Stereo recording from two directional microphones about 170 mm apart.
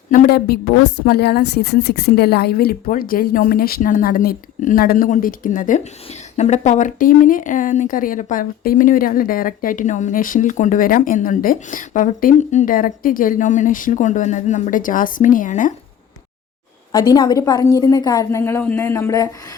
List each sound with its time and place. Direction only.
0.1 s a woman's voice: 60° left (ahead or behind)
16.9 s a woman's voice: 25° left (ahead or behind)